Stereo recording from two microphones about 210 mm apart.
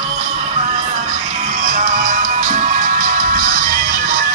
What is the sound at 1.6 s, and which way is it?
Music, 40° right (ahead or behind).